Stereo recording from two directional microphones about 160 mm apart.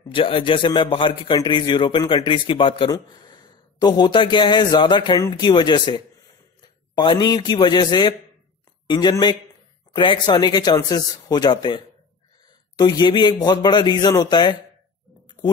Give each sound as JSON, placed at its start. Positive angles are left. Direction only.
{"t": 0.1, "sound": "a man's voice", "side_deg": 35}